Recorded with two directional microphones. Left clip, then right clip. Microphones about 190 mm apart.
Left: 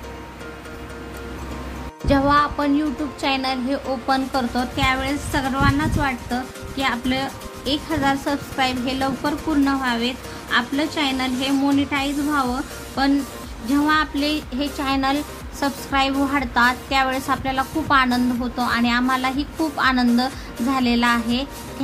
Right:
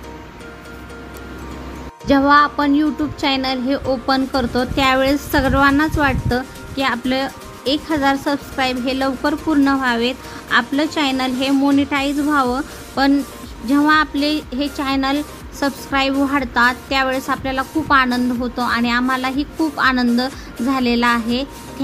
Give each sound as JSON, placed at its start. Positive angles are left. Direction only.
{"t": 2.0, "sound": "a woman's voice", "side_deg": -20}
{"t": 4.8, "sound": "a woman's voice", "side_deg": -30}